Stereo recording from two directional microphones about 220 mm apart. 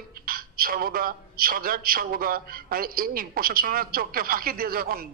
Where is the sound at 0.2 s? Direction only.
40° right (ahead or behind).